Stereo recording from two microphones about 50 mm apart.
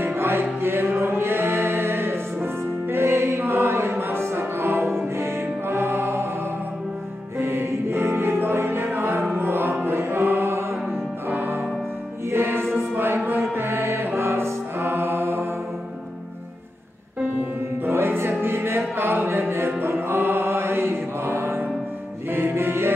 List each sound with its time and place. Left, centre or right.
0.0 s music: right
5.1 s music: right
7.3 s music: right
13.6 s mantra: right
17.8 s music: right
19.8 s mantra: right
22.3 s music: right